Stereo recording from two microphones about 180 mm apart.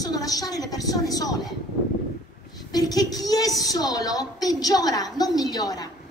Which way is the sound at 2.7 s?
20° left (ahead or behind).